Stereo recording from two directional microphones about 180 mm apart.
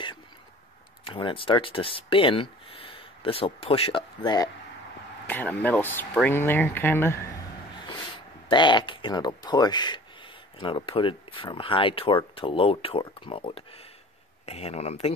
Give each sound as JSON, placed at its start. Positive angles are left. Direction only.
{"t": 1.0, "sound": "speech", "side_deg": 30}
{"t": 5.3, "sound": "speech", "side_deg": 10}
{"t": 8.5, "sound": "speech", "side_deg": 25}